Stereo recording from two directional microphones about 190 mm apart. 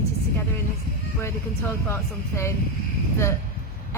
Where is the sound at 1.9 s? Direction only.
15° left (ahead or behind).